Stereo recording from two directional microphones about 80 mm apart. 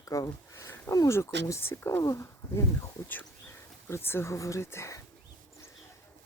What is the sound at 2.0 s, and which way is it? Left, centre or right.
Speech, left.